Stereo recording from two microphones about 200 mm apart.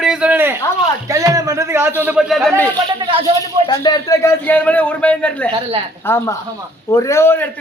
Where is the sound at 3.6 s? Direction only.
20° left (ahead or behind).